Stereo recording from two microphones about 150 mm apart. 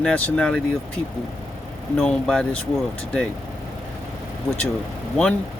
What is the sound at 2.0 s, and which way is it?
Speech, 5° left (ahead or behind).